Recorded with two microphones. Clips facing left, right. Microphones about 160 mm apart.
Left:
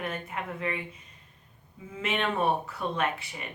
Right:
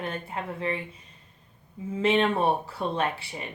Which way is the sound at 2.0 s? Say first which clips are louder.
Right 6 dB; 30° right (ahead or behind).